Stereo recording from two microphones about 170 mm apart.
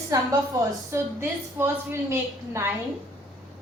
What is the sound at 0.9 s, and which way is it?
A woman's voice, 15° right (ahead or behind).